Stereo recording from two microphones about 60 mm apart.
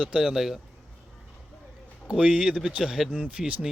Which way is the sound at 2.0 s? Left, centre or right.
Centre.